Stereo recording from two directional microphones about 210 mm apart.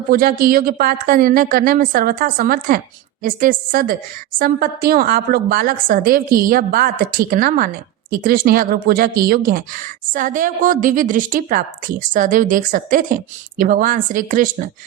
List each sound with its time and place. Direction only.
0.1 s a woman's voice: 45° right (ahead or behind)